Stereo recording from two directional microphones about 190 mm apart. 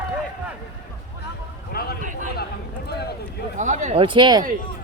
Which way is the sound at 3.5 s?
40° right (ahead or behind).